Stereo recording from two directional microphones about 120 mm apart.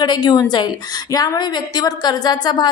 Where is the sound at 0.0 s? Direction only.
35° left (ahead or behind).